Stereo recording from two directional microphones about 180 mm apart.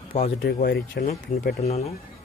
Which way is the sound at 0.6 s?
60° left (ahead or behind).